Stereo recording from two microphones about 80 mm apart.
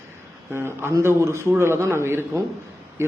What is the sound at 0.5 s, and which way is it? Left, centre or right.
A man's voice, right.